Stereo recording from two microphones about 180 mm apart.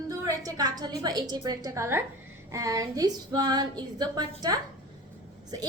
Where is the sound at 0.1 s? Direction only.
20° right (ahead or behind).